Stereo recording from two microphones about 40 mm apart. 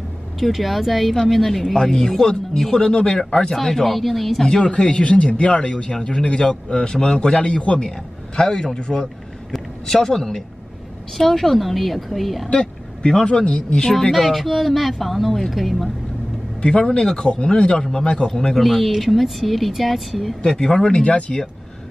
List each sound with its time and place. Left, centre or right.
0.4 s speech: centre
3.5 s speech: centre
4.5 s speech: left
9.5 s speech: centre
12.4 s speech: left
14.1 s speech: centre
16.6 s speech: left
17.0 s speech: centre
18.3 s speech: centre
20.4 s speech: centre
20.9 s speech: left